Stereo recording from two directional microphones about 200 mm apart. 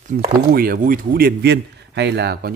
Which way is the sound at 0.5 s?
45° right (ahead or behind).